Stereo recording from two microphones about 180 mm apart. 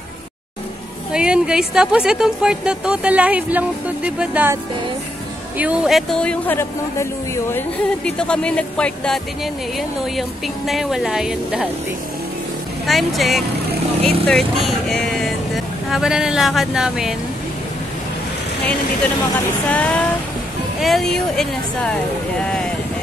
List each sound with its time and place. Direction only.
1.1 s speech: 5° right (ahead or behind)
5.6 s speech: 5° right (ahead or behind)
12.8 s speech: centre (ahead or behind)
19.7 s speech: 10° left (ahead or behind)